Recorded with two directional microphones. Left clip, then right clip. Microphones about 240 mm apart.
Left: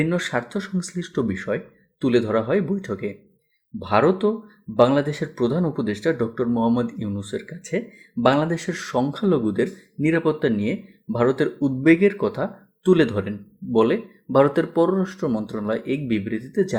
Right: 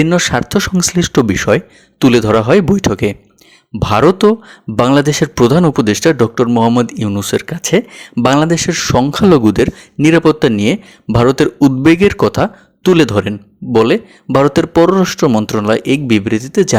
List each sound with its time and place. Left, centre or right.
0.0 s speech: right